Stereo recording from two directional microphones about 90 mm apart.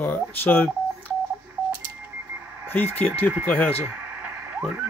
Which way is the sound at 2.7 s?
20° left (ahead or behind).